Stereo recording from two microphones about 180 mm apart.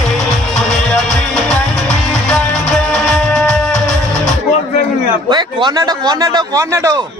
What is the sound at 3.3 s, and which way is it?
Music, centre (ahead or behind).